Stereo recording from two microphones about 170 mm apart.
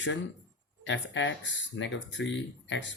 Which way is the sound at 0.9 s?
90° left.